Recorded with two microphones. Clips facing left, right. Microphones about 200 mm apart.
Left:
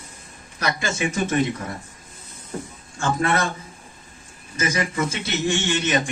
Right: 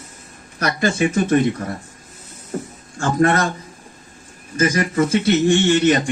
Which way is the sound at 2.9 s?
55° right (ahead or behind).